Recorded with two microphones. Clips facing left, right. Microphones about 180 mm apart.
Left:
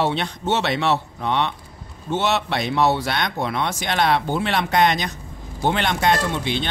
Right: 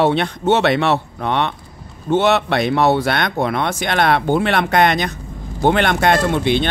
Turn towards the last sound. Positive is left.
turn(degrees=-60)  # may be behind; listen again after turning